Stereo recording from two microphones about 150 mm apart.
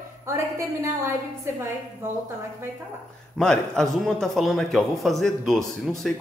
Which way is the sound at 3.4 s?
5° left (ahead or behind).